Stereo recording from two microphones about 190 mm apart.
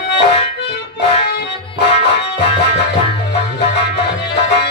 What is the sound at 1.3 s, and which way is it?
Music, 60° left (ahead or behind).